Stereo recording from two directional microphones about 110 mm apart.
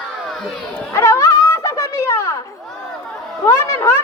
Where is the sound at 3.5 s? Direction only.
25° left (ahead or behind).